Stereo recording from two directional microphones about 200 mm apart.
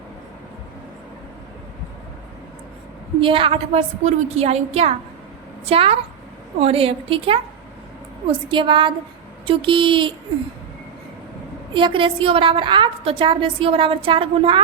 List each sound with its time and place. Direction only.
3.2 s a woman's voice: 25° right (ahead or behind)
8.4 s a woman's voice: 25° right (ahead or behind)
11.7 s a woman's voice: 25° right (ahead or behind)